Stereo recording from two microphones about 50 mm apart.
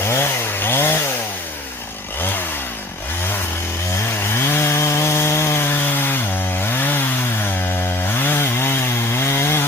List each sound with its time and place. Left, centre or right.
0.1 s chainsaw: left
4.4 s chainsaw: left
5.6 s chainsaw: left
8.1 s chainsaw: left